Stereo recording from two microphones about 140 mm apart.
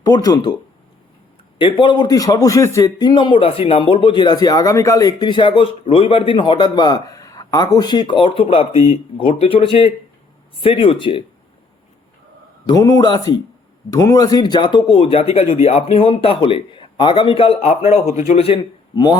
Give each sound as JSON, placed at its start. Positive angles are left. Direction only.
{"t": 0.0, "sound": "a man's voice", "side_deg": 25}
{"t": 1.5, "sound": "a man's voice", "side_deg": 35}
{"t": 12.6, "sound": "a man's voice", "side_deg": 25}